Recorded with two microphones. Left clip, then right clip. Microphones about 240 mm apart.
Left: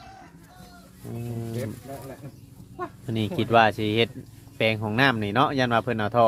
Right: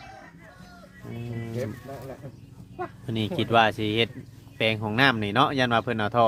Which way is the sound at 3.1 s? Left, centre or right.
Centre.